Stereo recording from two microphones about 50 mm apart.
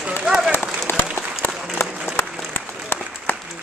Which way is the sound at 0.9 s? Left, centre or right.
Left.